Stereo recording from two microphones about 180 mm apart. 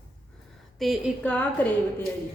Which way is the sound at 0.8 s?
Centre (ahead or behind).